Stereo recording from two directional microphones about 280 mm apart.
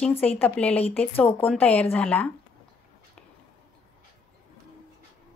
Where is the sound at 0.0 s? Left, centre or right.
Centre.